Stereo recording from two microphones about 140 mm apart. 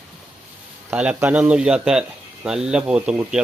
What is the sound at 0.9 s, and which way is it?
Speech, 10° right (ahead or behind).